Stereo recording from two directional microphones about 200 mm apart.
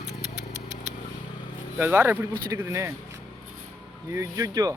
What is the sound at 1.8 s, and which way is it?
Speech, 10° right (ahead or behind).